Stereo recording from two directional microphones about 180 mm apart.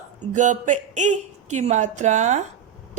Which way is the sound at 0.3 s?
45° right (ahead or behind).